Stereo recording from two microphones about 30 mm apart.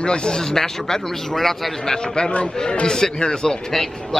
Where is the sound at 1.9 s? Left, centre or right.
Left.